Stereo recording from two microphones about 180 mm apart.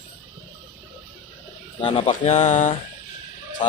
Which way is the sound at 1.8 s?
30° left (ahead or behind).